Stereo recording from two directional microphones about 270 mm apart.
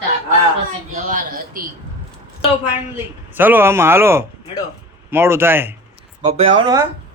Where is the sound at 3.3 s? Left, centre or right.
Centre.